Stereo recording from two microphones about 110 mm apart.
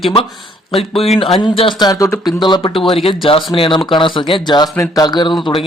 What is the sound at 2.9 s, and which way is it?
Speech, 60° left (ahead or behind).